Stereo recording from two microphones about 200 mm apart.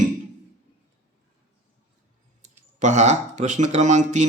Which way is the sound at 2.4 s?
35° right (ahead or behind).